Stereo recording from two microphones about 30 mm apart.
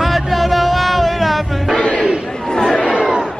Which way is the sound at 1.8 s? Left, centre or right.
Left.